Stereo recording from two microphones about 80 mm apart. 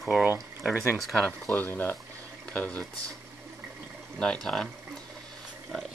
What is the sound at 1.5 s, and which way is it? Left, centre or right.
Speech, left.